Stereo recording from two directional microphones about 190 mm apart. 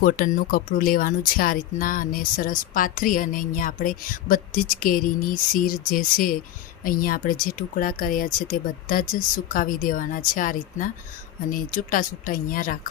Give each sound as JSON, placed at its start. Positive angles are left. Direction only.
{"t": 0.0, "sound": "speech", "side_deg": 45}